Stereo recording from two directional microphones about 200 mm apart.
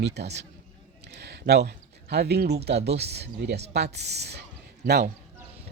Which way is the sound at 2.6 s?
55° right (ahead or behind).